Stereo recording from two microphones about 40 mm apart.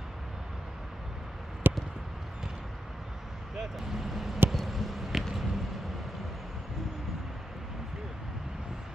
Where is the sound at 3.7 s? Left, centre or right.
Centre.